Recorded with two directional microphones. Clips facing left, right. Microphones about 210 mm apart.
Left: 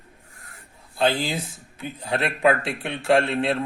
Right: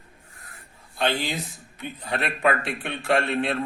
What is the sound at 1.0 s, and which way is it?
A man's voice, 30° left (ahead or behind).